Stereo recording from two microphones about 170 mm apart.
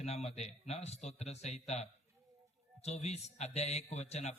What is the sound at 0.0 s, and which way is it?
A man's voice, 40° left (ahead or behind).